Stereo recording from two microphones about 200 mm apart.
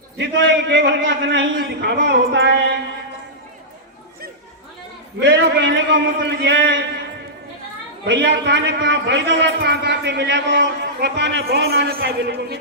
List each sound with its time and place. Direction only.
0.2 s a man's voice: 65° right (ahead or behind)
5.2 s a man's voice: 60° right (ahead or behind)
8.0 s a man's voice: 65° right (ahead or behind)